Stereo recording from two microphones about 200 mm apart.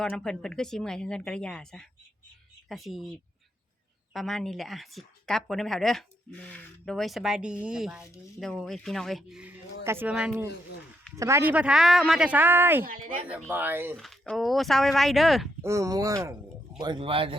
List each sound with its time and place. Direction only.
0.0 s a woman's voice: 5° left (ahead or behind)
4.1 s a woman's voice: centre (ahead or behind)
12.8 s speech: 45° right (ahead or behind)
13.2 s speech: 10° right (ahead or behind)
13.9 s a woman's voice: centre (ahead or behind)
15.6 s speech: 15° right (ahead or behind)
16.9 s speech: 25° right (ahead or behind)